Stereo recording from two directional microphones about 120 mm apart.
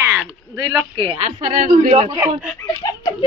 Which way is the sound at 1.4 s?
80° right.